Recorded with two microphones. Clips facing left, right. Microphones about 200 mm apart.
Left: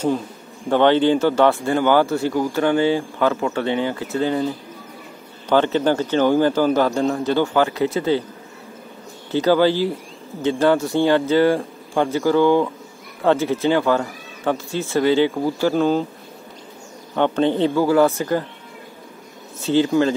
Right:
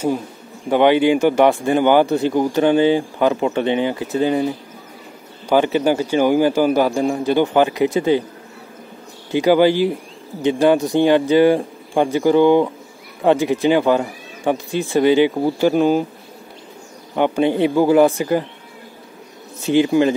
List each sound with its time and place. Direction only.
0.7 s speech: 10° right (ahead or behind)
9.3 s speech: 15° right (ahead or behind)
17.1 s speech: 10° right (ahead or behind)
19.6 s speech: 15° right (ahead or behind)